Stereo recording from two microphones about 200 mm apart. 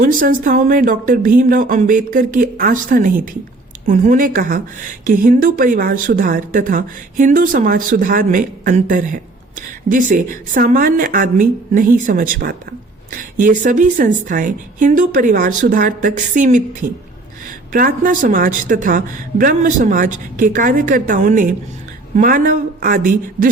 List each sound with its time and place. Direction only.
0.0 s a woman's voice: 45° right (ahead or behind)
17.7 s a woman's voice: 45° right (ahead or behind)